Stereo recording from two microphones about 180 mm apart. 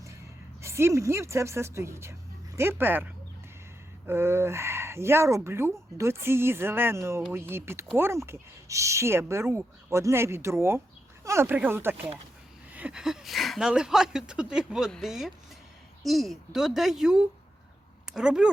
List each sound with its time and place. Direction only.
0.6 s speech: 15° right (ahead or behind)